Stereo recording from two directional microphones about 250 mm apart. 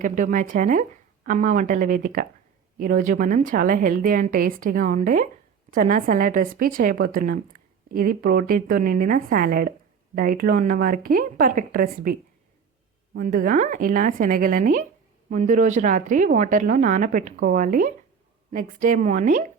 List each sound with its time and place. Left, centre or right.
0.0 s a woman's voice: right
13.1 s a woman's voice: right